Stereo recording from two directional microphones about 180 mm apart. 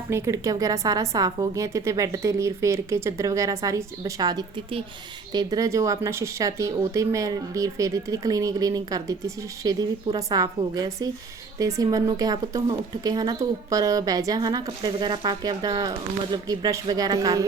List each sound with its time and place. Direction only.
0.1 s a woman's voice: 15° right (ahead or behind)